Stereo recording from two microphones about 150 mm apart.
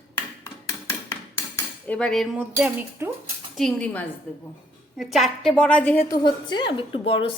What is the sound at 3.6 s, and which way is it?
A woman's voice, 5° left (ahead or behind).